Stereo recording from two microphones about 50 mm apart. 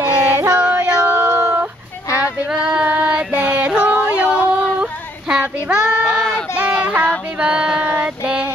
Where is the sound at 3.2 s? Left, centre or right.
Right.